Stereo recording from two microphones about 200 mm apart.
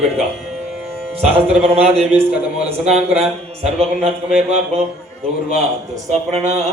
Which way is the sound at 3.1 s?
30° right (ahead or behind).